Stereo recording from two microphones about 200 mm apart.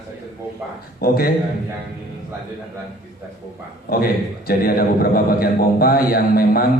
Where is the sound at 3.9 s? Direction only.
50° left (ahead or behind).